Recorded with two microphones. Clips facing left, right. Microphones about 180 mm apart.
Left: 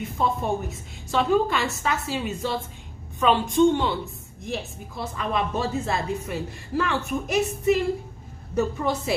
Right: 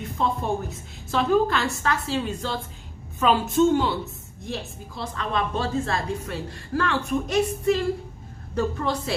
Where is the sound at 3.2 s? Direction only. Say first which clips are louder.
Left 1 dB; 5° right (ahead or behind).